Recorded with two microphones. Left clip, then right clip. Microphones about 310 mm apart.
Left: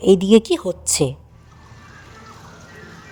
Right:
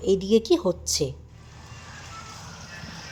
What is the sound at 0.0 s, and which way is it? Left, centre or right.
A woman's voice, left.